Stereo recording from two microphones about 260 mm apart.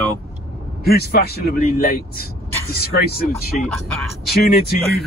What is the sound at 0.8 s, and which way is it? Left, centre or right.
A man's voice, left.